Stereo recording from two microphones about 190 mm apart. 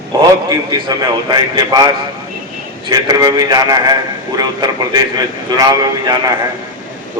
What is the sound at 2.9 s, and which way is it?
A man's voice, 20° right (ahead or behind).